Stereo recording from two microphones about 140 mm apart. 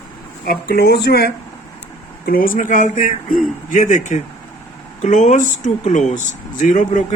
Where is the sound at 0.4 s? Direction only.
90° left.